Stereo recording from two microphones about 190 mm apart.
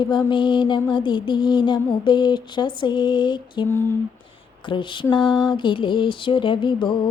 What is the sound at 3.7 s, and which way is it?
Speech, 10° left (ahead or behind).